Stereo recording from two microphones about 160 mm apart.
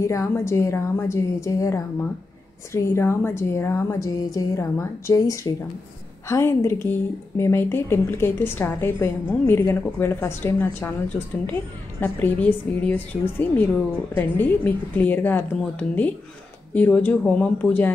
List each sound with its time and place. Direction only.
0.0 s a woman's voice: 20° left (ahead or behind)
14.1 s a woman's voice: 10° left (ahead or behind)